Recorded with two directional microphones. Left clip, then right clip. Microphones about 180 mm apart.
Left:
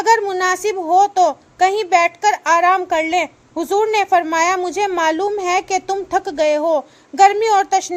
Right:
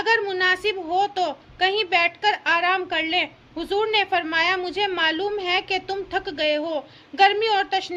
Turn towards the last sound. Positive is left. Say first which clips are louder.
# left 7 dB
turn(degrees=50)  # may be behind; listen again after turning